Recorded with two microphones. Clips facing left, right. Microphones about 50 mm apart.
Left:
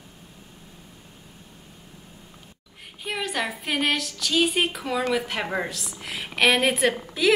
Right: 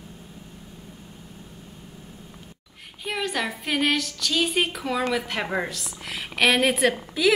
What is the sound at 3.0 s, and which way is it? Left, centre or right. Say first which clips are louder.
A woman's voice: right 1 dB; centre.